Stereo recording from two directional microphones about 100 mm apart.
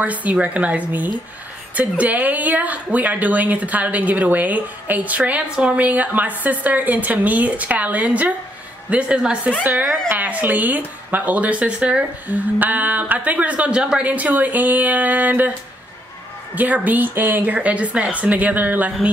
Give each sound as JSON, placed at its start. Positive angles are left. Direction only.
{"t": 0.0, "sound": "speech", "side_deg": -15}
{"t": 16.5, "sound": "speech", "side_deg": -15}